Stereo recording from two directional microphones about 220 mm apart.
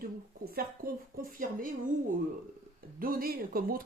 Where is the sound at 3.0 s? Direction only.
40° right (ahead or behind).